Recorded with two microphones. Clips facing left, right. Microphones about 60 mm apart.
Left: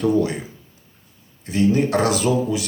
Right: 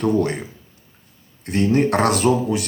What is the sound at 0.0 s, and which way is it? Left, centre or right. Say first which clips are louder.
Speech: even; right.